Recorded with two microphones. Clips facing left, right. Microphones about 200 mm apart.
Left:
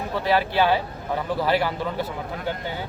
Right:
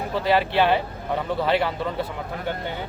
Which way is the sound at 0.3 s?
Centre (ahead or behind).